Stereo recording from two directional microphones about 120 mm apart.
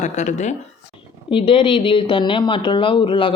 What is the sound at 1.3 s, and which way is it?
Speech, 45° left (ahead or behind).